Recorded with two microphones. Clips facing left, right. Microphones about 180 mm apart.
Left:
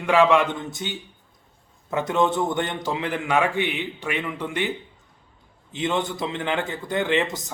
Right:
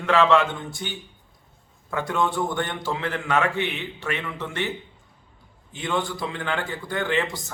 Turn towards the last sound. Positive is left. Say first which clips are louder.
# left 2 dB
turn(degrees=20)  # may be behind; listen again after turning